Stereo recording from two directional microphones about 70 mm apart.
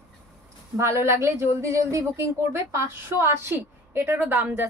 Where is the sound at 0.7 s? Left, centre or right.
Right.